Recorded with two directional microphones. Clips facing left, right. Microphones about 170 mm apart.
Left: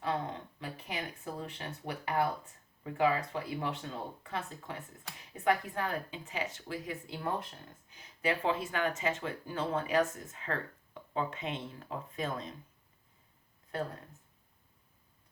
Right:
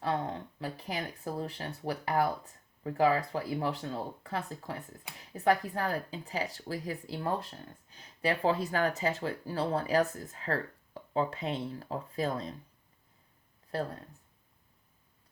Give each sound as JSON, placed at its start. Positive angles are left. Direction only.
{"t": 0.6, "sound": "speech", "side_deg": -40}
{"t": 13.7, "sound": "speech", "side_deg": -35}